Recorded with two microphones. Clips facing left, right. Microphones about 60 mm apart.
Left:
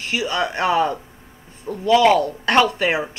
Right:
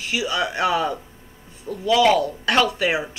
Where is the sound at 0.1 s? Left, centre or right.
Left.